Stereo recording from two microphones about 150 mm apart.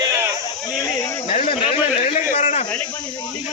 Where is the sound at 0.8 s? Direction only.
25° left (ahead or behind).